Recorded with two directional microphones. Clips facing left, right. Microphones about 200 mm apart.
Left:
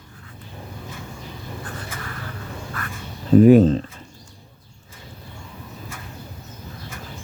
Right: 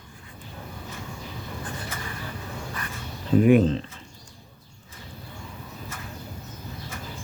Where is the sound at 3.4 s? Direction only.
40° left (ahead or behind).